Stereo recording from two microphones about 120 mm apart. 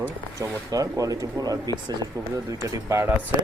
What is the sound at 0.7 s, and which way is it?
Speech, 30° right (ahead or behind).